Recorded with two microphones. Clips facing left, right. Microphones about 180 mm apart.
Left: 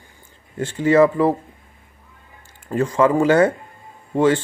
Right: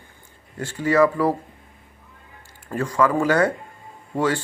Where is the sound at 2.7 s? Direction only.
25° left (ahead or behind).